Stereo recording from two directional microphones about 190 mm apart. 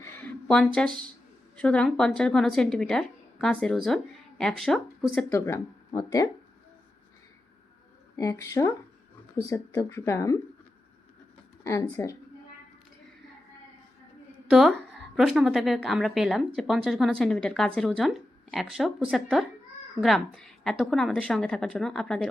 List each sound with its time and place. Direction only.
0.0 s a sound: 10° left (ahead or behind)
1.5 s a woman's voice: 5° left (ahead or behind)
5.3 s speech: 15° left (ahead or behind)
8.1 s speech: 15° left (ahead or behind)
11.6 s speech: 15° left (ahead or behind)
14.5 s a woman's voice: centre (ahead or behind)